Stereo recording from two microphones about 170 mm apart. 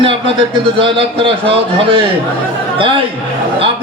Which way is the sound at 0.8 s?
30° right (ahead or behind).